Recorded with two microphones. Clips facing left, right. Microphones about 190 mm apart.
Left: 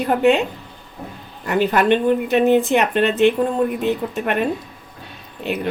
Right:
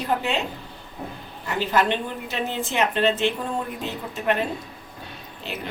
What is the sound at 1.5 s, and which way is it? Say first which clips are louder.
Speech: left 7 dB; 60° left (ahead or behind).